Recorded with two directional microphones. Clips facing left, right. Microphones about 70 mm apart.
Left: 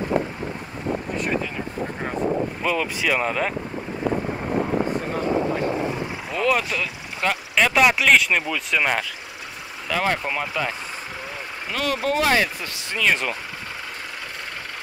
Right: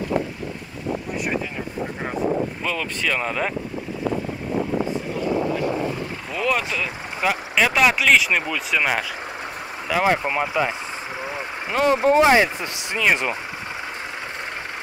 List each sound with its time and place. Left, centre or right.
2.6 s speech: centre
6.3 s speech: centre
9.8 s speech: centre